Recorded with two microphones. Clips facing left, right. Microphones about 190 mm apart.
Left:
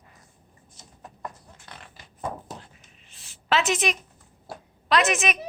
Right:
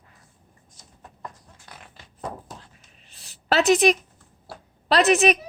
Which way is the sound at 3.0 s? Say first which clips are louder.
Right 5 dB; 40° right (ahead or behind).